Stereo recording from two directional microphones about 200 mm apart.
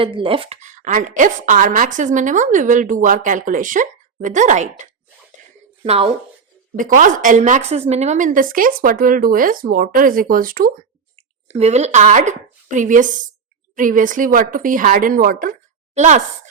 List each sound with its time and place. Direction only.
0.0 s a woman's voice: 25° right (ahead or behind)
5.4 s a sound: 35° right (ahead or behind)
5.8 s a woman's voice: 30° right (ahead or behind)
11.2 s a woman's voice: 30° right (ahead or behind)